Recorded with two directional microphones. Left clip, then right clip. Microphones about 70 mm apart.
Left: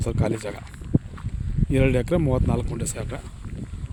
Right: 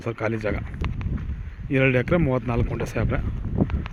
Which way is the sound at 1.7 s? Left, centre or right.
Left.